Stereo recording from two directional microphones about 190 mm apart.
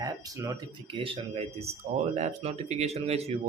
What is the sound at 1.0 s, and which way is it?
Speech, 30° right (ahead or behind).